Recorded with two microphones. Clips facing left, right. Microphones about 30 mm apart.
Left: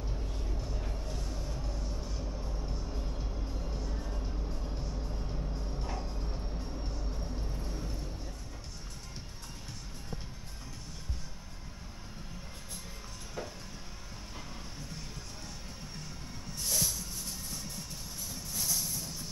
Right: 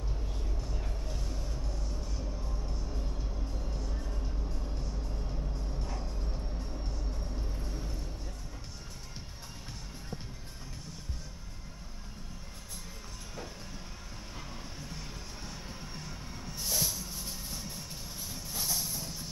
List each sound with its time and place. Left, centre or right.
0.1 s music: centre
14.8 s music: centre